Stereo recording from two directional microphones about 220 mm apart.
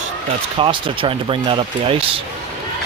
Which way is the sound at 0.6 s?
25° right (ahead or behind).